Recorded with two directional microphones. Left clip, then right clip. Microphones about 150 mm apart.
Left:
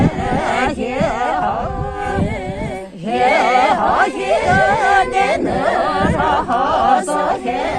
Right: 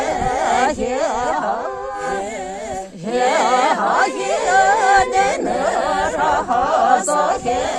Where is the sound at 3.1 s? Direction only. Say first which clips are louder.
Left 2 dB; 65° right (ahead or behind).